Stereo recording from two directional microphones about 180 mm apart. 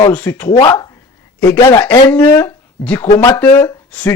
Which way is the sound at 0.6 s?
20° left (ahead or behind).